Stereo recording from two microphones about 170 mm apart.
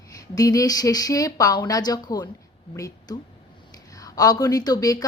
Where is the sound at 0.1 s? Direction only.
20° left (ahead or behind).